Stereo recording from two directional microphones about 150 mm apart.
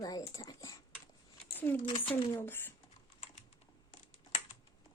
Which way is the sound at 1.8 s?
35° left (ahead or behind).